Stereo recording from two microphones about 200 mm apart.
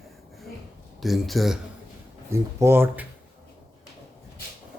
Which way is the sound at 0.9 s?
Centre (ahead or behind).